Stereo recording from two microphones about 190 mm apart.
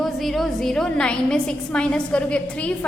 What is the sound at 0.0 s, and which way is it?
A woman's voice, centre (ahead or behind).